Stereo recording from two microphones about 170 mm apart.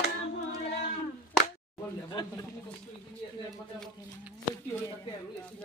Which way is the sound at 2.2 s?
25° left (ahead or behind).